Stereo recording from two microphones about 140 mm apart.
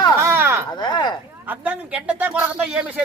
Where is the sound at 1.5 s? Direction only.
10° right (ahead or behind).